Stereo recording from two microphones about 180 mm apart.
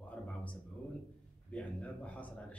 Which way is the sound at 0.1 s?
10° left (ahead or behind).